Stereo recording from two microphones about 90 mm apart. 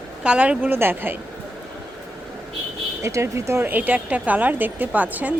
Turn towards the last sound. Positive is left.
turn(degrees=-15)  # may be behind; listen again after turning